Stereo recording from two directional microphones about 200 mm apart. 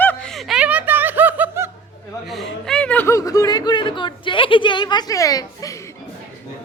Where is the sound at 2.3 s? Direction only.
Centre (ahead or behind); by 5.8 s 15° left (ahead or behind).